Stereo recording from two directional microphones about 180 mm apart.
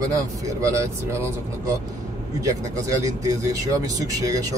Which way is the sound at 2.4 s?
20° right (ahead or behind).